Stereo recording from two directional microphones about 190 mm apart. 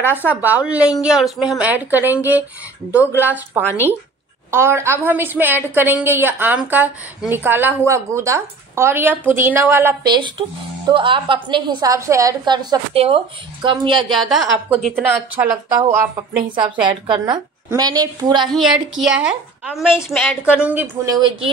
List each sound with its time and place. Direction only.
0.0 s a woman's voice: 10° left (ahead or behind)
0.3 s a woman's voice: 10° right (ahead or behind)
10.1 s a woman's voice: 25° right (ahead or behind)
14.1 s a woman's voice: centre (ahead or behind)
16.5 s a woman's voice: 25° right (ahead or behind)
18.5 s a woman's voice: centre (ahead or behind); by 21.2 s 15° right (ahead or behind)